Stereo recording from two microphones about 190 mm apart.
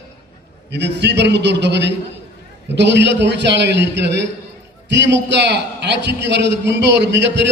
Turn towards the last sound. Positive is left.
turn(degrees=-65)  # may be behind; listen again after turning